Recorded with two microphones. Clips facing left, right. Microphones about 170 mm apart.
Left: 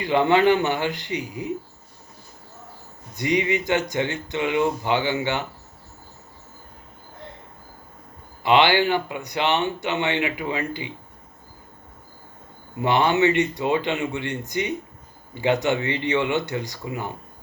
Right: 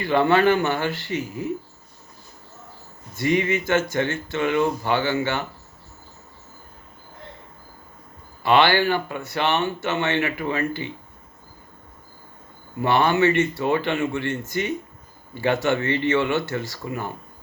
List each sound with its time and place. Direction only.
0.0 s speech: 15° left (ahead or behind)
3.2 s speech: 15° left (ahead or behind)
8.4 s speech: 15° left (ahead or behind)
12.8 s speech: 15° left (ahead or behind)